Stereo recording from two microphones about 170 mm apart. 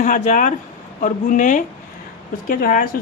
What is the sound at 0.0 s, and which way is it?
Speech, 50° left (ahead or behind).